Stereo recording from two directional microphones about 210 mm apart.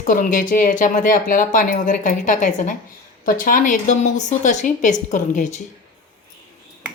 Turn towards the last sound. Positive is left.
turn(degrees=35)  # may be behind; listen again after turning